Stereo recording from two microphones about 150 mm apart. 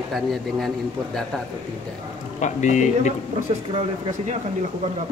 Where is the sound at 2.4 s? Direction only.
55° left (ahead or behind).